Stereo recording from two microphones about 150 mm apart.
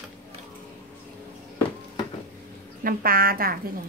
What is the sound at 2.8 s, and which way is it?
Speech, 75° right (ahead or behind).